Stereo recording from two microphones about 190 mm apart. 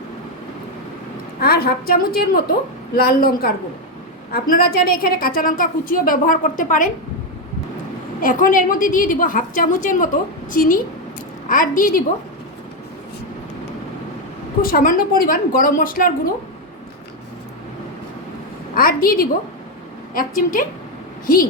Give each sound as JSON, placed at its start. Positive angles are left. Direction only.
{"t": 1.4, "sound": "a woman's voice", "side_deg": 55}
{"t": 8.2, "sound": "a woman's voice", "side_deg": 45}
{"t": 14.6, "sound": "a woman's voice", "side_deg": 50}
{"t": 18.7, "sound": "a woman's voice", "side_deg": 50}